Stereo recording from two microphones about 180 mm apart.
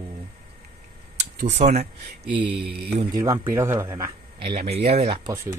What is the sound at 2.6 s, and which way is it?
Speech, 60° right (ahead or behind).